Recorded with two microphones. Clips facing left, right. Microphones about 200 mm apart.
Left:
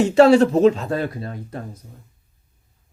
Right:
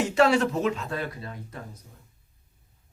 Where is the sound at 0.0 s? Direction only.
30° left (ahead or behind).